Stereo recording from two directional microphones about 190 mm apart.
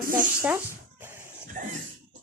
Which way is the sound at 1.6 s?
45° right (ahead or behind).